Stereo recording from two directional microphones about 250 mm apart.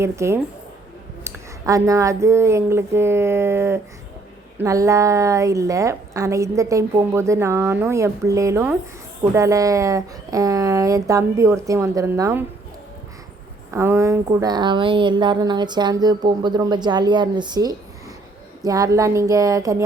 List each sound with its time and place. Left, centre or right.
0.0 s a woman's voice: centre
13.7 s a woman's voice: centre